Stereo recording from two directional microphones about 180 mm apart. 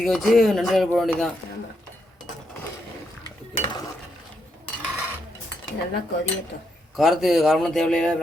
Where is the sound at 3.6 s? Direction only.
25° left (ahead or behind).